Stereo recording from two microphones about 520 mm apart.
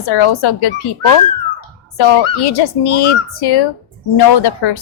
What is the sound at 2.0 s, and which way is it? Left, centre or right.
A woman's voice, left.